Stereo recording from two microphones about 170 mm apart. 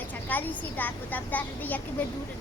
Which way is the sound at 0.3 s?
10° left (ahead or behind).